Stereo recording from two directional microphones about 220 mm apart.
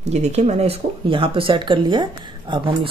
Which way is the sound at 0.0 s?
30° right (ahead or behind).